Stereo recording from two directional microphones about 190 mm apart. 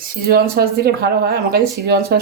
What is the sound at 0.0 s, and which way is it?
Speech, 50° right (ahead or behind).